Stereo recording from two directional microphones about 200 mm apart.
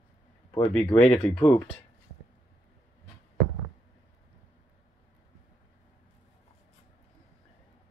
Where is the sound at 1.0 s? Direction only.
5° left (ahead or behind).